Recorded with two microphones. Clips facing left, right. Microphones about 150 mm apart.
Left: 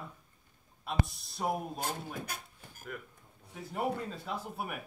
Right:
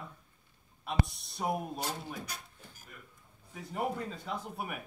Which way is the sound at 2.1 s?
50° left (ahead or behind).